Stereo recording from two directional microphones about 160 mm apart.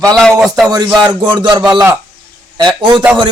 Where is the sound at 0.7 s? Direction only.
25° right (ahead or behind).